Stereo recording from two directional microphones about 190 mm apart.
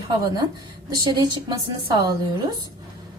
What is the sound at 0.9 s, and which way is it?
Speech, 20° right (ahead or behind).